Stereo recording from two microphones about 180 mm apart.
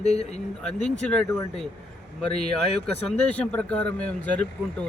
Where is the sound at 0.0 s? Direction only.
35° left (ahead or behind).